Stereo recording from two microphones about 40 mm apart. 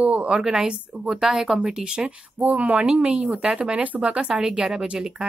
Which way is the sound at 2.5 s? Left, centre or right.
Right.